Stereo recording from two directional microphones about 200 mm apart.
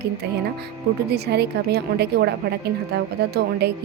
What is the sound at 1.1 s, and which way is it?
A woman's voice, 55° right (ahead or behind).